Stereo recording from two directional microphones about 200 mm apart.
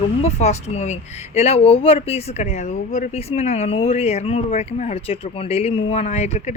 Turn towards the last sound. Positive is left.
turn(degrees=35)  # may be behind; listen again after turning